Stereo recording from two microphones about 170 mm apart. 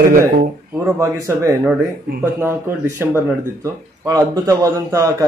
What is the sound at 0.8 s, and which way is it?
Speech, 20° right (ahead or behind).